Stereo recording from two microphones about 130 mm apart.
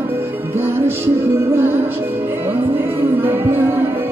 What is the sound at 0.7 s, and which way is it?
Music, 20° right (ahead or behind).